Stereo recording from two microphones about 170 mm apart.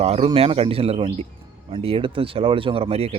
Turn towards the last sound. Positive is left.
turn(degrees=-35)  # may be behind; listen again after turning